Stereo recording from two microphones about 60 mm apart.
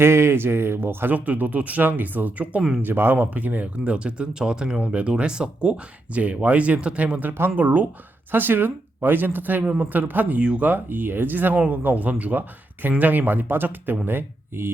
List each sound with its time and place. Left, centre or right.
0.0 s speech: right
1.1 s speech: right
2.8 s speech: right
9.6 s speech: centre
9.9 s speech: right